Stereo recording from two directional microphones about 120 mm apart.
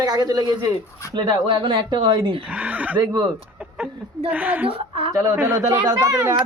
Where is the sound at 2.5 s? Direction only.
15° right (ahead or behind).